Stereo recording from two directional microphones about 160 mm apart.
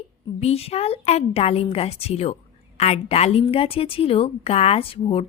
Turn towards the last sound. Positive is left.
turn(degrees=35)  # may be behind; listen again after turning